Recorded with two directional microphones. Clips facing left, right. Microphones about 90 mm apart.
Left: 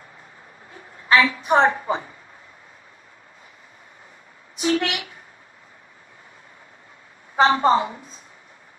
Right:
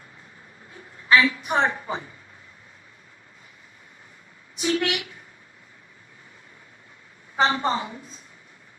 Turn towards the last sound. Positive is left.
turn(degrees=35)  # may be behind; listen again after turning